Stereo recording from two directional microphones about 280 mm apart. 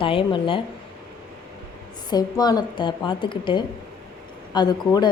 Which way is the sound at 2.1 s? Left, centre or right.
Centre.